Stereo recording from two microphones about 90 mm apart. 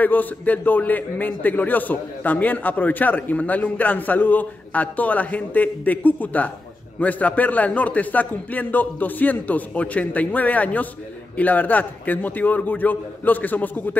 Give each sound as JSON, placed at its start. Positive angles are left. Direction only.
{"t": 0.0, "sound": "a man's voice", "side_deg": 20}